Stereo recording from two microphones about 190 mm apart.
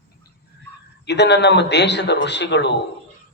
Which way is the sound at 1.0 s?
60° left (ahead or behind).